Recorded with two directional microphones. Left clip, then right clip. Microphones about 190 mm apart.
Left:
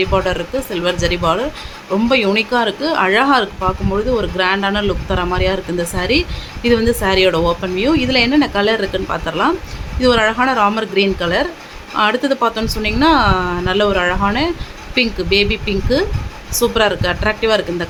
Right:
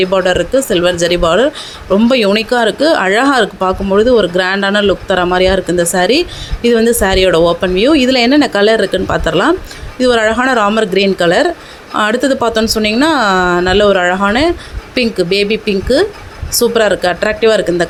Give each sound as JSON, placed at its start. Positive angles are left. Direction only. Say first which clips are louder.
{"t": 0.0, "sound": "speech", "louder": "right 5 dB", "side_deg": -25}